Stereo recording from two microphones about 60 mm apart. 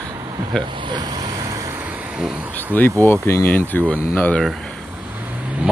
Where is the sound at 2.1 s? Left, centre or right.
Centre.